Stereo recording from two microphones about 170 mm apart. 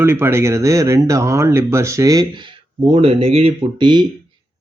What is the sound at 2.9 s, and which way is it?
Speech, 35° right (ahead or behind).